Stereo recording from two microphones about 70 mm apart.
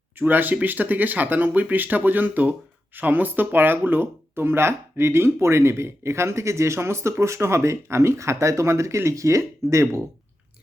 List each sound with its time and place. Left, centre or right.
0.2 s speech: right